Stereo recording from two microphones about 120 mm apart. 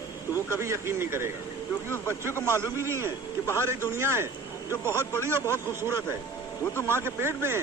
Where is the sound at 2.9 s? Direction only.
20° right (ahead or behind).